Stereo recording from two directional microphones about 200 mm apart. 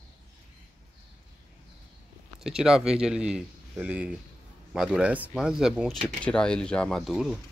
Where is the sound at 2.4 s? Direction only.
5° right (ahead or behind).